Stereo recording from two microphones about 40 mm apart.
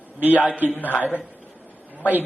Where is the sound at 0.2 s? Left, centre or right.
Right.